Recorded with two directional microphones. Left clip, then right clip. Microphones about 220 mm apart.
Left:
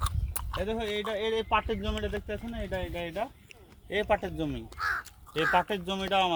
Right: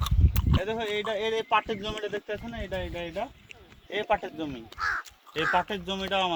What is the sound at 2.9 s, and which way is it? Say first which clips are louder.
Speech: even; 20° left (ahead or behind).